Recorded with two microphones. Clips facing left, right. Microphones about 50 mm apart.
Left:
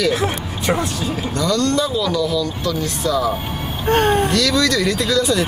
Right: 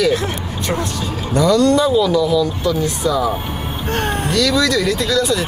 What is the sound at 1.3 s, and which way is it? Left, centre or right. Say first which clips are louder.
Speech: right 6 dB; centre.